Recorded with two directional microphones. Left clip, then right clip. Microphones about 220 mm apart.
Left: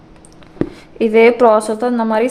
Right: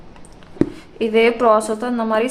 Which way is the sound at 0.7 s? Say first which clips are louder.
Left 4 dB; 35° left (ahead or behind).